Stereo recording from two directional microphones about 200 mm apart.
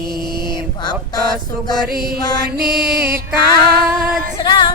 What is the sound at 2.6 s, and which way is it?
Music, 10° right (ahead or behind).